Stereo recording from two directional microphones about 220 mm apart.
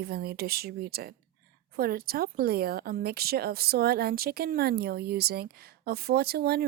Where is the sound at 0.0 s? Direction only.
45° right (ahead or behind).